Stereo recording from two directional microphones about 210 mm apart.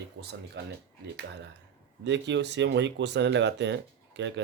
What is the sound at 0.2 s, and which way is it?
Speech, 50° right (ahead or behind).